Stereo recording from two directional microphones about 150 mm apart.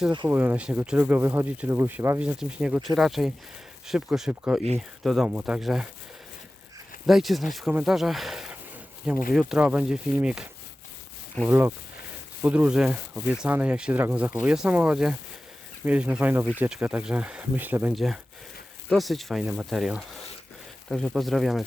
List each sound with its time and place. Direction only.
0.3 s speech: 15° right (ahead or behind)
7.1 s speech: centre (ahead or behind)
17.9 s speech: centre (ahead or behind)